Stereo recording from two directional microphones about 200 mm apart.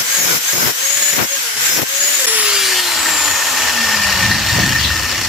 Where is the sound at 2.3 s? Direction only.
5° right (ahead or behind).